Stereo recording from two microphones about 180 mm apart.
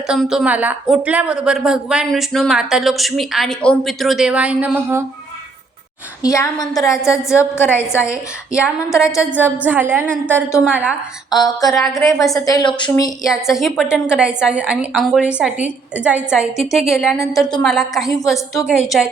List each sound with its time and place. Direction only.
0.1 s a woman's voice: 5° right (ahead or behind)
6.2 s a woman's voice: 20° left (ahead or behind)
8.5 s a woman's voice: 5° right (ahead or behind)
11.3 s a woman's voice: 20° left (ahead or behind)
11.7 s a woman's voice: centre (ahead or behind)
12.0 s a woman's voice: 20° left (ahead or behind)
13.5 s a woman's voice: centre (ahead or behind)